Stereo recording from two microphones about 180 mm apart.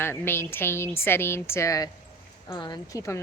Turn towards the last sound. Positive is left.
turn(degrees=15)  # may be behind; listen again after turning